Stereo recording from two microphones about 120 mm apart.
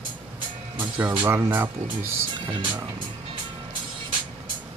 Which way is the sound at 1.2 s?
20° right (ahead or behind).